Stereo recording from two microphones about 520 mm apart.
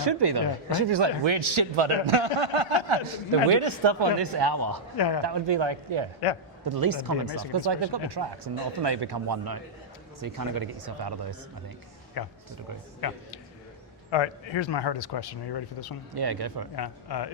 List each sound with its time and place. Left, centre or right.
0.0 s speech: right
4.9 s speech: left
5.2 s speech: right
6.7 s speech: right
12.2 s a man's voice: left
14.1 s speech: left
16.1 s speech: right
16.7 s speech: left